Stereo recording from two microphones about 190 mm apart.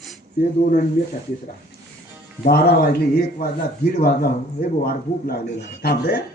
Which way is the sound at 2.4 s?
55° left (ahead or behind).